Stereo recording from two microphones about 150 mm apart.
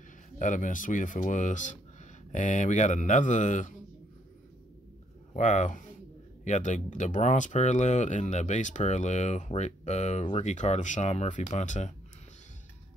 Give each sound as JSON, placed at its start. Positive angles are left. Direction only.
{"t": 0.4, "sound": "speech", "side_deg": 60}
{"t": 5.3, "sound": "speech", "side_deg": 55}